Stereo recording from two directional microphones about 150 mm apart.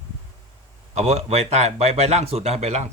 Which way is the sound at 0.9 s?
50° right (ahead or behind).